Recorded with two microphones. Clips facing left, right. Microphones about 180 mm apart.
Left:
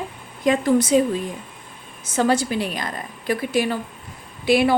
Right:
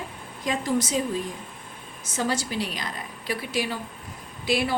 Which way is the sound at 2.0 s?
60° left (ahead or behind).